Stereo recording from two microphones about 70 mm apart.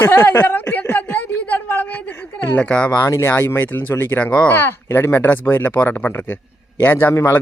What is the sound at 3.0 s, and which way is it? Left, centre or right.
Speech, left.